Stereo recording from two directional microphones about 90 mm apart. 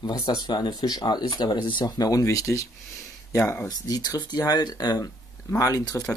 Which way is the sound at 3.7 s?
45° left (ahead or behind).